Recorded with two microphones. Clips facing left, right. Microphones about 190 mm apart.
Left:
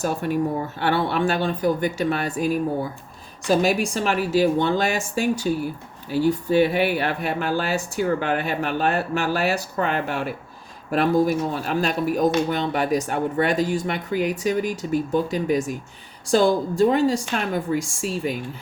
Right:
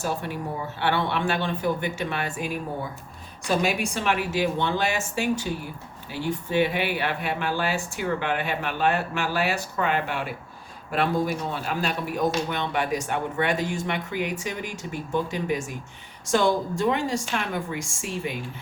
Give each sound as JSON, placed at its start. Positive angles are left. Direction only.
{"t": 0.0, "sound": "speech", "side_deg": 45}
{"t": 3.5, "sound": "speech", "side_deg": 40}